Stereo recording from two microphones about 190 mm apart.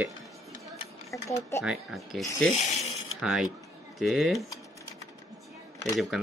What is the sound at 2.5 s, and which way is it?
Speech, 35° left (ahead or behind).